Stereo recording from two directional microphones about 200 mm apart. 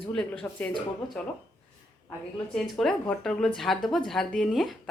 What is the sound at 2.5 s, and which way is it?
A woman's voice, 5° left (ahead or behind).